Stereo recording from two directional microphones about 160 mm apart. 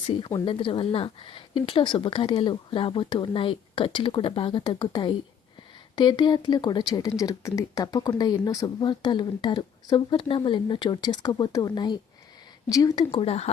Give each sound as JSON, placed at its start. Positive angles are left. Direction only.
{"t": 0.1, "sound": "speech", "side_deg": 30}